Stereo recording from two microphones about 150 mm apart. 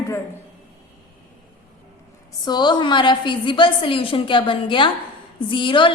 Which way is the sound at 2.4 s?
30° left (ahead or behind).